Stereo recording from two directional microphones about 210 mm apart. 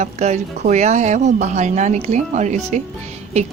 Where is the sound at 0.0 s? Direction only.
35° right (ahead or behind).